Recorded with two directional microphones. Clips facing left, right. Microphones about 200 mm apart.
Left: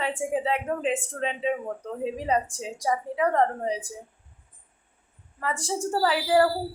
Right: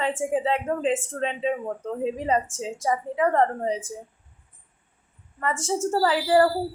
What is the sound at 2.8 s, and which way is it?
Speech, 5° left (ahead or behind).